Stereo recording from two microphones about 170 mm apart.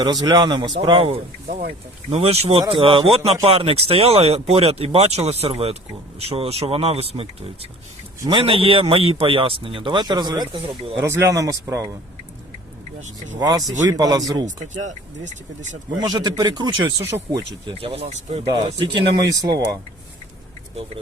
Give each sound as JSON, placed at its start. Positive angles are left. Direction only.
{"t": 0.0, "sound": "a man's voice", "side_deg": -20}
{"t": 10.9, "sound": "speech", "side_deg": -15}
{"t": 13.0, "sound": "speech", "side_deg": -45}
{"t": 13.4, "sound": "speech", "side_deg": -20}
{"t": 14.4, "sound": "speech", "side_deg": -45}
{"t": 16.0, "sound": "speech", "side_deg": -25}
{"t": 17.0, "sound": "speech", "side_deg": -15}
{"t": 17.7, "sound": "a man's voice", "side_deg": -30}
{"t": 18.6, "sound": "speech", "side_deg": -25}